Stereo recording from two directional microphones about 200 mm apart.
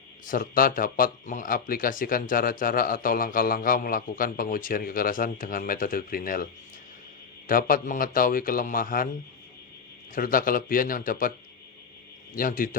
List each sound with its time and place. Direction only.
0.3 s speech: 45° left (ahead or behind)
10.2 s speech: 45° left (ahead or behind)